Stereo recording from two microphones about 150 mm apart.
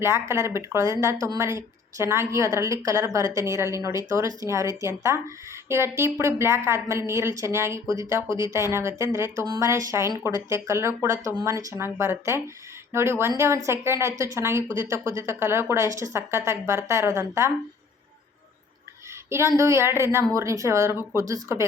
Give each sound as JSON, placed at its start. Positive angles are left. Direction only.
{"t": 0.0, "sound": "a woman's voice", "side_deg": -15}
{"t": 19.3, "sound": "a woman's voice", "side_deg": -20}